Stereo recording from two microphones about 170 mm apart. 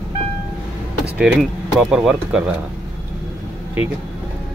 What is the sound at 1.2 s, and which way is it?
Speech, 5° right (ahead or behind).